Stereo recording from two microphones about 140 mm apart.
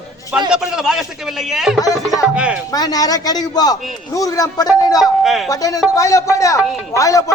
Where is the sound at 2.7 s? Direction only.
25° left (ahead or behind).